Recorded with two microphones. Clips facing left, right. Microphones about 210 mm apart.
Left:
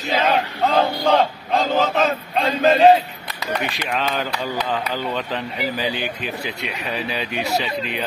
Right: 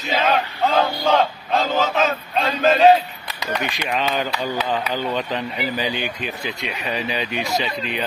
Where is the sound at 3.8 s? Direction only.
Centre (ahead or behind).